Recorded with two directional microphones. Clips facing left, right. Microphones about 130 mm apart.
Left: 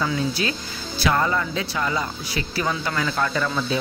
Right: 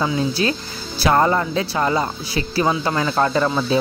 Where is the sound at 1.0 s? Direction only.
40° right (ahead or behind).